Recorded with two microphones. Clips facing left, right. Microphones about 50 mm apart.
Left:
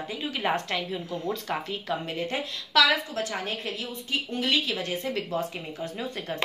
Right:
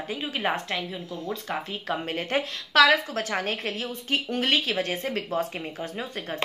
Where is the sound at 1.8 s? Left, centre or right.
Right.